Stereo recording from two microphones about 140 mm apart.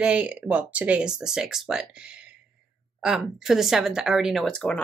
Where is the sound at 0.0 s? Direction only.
10° right (ahead or behind).